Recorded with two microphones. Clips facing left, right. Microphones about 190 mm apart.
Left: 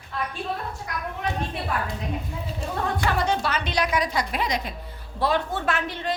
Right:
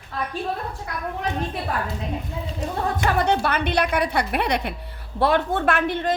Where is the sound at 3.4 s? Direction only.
55° right (ahead or behind).